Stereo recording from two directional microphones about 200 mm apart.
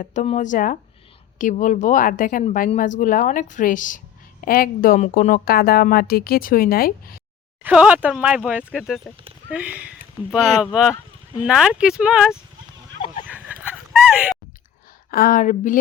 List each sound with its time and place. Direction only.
0.0 s speech: 40° left (ahead or behind)
7.6 s speech: 5° right (ahead or behind)
13.2 s a sound: 5° right (ahead or behind)
15.1 s speech: 45° left (ahead or behind)